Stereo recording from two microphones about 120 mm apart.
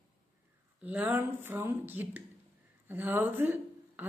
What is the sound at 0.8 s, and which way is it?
Speech, 10° right (ahead or behind).